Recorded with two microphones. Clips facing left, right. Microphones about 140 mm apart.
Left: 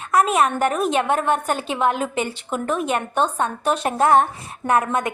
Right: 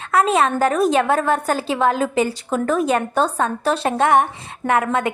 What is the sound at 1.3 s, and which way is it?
A woman's voice, 35° right (ahead or behind).